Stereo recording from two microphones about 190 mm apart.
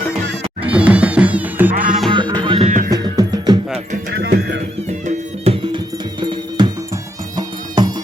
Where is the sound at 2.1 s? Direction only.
25° right (ahead or behind).